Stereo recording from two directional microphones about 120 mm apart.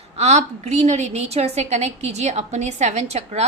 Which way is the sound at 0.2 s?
65° right (ahead or behind).